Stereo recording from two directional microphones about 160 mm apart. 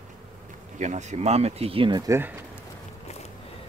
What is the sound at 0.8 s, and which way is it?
Speech, 45° right (ahead or behind).